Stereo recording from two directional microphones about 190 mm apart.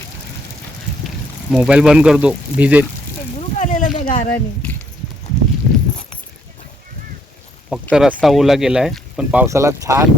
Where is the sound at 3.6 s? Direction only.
40° left (ahead or behind).